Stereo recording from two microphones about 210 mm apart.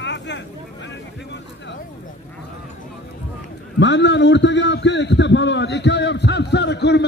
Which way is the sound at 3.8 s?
60° left (ahead or behind).